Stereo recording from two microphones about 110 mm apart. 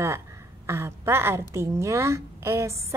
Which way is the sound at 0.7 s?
25° right (ahead or behind).